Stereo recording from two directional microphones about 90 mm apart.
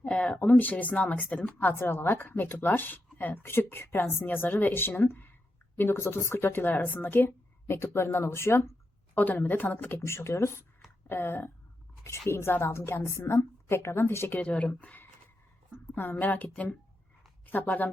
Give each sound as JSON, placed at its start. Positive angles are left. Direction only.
{"t": 0.0, "sound": "speech", "side_deg": 15}
{"t": 14.3, "sound": "a woman's voice", "side_deg": 15}